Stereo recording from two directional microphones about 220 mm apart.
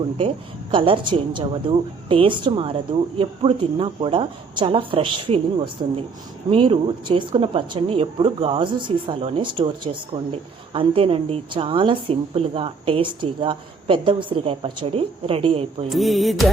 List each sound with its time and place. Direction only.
0.2 s a woman's voice: 25° right (ahead or behind)
15.9 s music: centre (ahead or behind)